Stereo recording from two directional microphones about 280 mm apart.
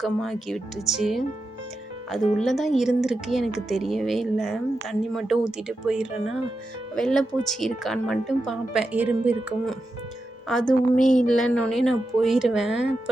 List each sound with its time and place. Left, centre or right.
0.0 s speech: centre
2.4 s speech: centre
11.0 s speech: left
11.3 s speech: centre